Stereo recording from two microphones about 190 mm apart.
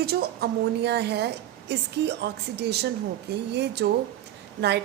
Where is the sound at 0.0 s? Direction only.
55° right (ahead or behind).